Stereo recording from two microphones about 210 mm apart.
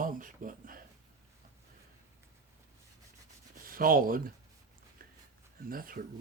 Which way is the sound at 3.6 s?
40° right (ahead or behind).